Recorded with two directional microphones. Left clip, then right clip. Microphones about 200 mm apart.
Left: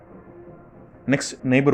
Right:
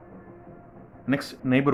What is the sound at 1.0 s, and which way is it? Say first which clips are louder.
Speech: left 4 dB; 25° left (ahead or behind).